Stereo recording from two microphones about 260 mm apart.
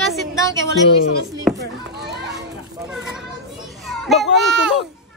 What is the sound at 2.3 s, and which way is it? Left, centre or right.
Children playing, centre.